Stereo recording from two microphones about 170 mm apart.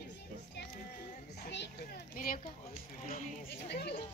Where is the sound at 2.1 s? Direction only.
55° left (ahead or behind).